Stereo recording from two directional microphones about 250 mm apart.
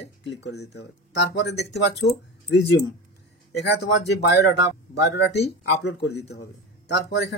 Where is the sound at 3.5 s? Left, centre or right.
Left.